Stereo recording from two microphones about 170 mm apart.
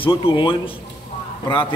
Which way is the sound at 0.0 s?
30° left (ahead or behind).